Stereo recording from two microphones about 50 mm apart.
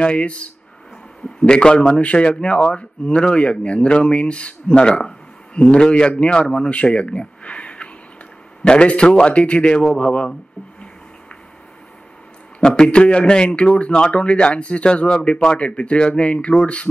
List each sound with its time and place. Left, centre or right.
0.0 s a man's voice: left
12.5 s a man's voice: centre